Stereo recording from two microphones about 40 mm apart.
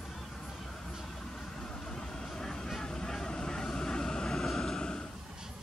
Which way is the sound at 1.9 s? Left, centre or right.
Centre.